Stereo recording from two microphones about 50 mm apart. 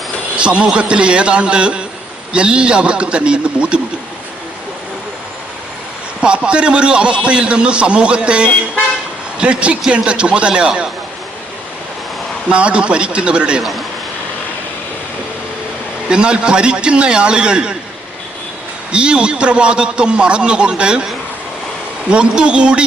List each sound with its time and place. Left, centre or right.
0.3 s a man's voice: right
6.2 s a man's voice: centre
12.5 s a man's voice: right
13.6 s a man's voice: centre
16.0 s a man's voice: centre
18.9 s a man's voice: centre
22.1 s a man's voice: centre